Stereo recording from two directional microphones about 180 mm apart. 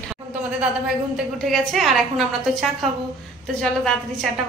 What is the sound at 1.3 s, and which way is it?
A woman's voice, centre (ahead or behind).